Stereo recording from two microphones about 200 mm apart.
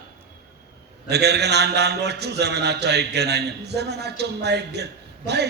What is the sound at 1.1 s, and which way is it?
A man's voice, 55° right (ahead or behind).